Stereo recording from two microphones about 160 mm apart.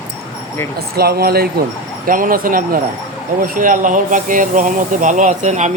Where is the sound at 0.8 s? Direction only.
75° right (ahead or behind).